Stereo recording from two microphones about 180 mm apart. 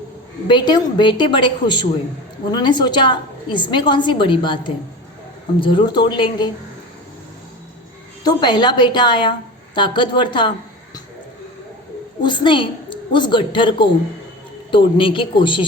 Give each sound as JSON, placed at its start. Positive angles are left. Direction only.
{"t": 0.4, "sound": "a woman's voice", "side_deg": 25}
{"t": 8.2, "sound": "a woman's voice", "side_deg": 25}
{"t": 12.2, "sound": "a woman's voice", "side_deg": 25}